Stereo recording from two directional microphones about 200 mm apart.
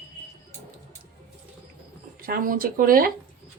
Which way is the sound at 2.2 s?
45° right (ahead or behind).